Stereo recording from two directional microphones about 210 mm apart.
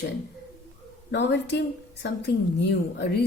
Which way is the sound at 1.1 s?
55° left (ahead or behind).